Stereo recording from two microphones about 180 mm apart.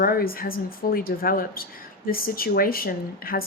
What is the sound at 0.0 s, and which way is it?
A woman's voice, 55° left (ahead or behind).